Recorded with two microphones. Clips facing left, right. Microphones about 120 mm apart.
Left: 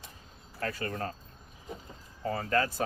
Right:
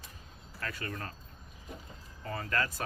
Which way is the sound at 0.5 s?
35° left (ahead or behind).